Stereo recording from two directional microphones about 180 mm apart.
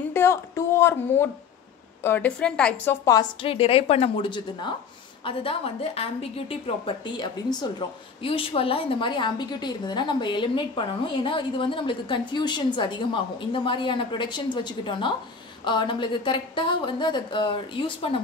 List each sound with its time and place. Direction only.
0.1 s speech: 15° left (ahead or behind)
3.2 s a woman's voice: 30° left (ahead or behind)
8.2 s a woman's voice: 30° left (ahead or behind)